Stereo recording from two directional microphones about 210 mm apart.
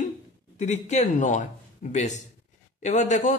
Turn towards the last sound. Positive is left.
turn(degrees=35)  # may be behind; listen again after turning